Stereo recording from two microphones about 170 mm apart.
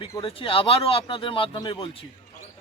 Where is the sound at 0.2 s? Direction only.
30° left (ahead or behind).